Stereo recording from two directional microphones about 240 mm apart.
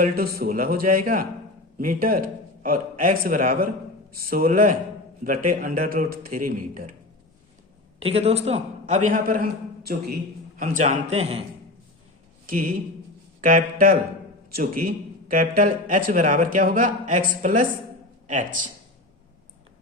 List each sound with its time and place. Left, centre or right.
0.0 s speech: right
7.9 s a man's voice: right
12.5 s speech: right